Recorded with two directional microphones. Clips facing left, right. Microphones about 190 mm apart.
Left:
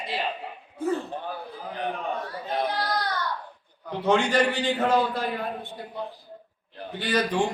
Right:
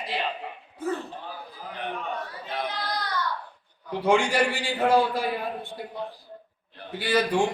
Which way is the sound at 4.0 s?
10° right (ahead or behind).